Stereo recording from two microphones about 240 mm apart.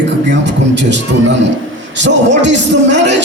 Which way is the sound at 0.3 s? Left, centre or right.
Right.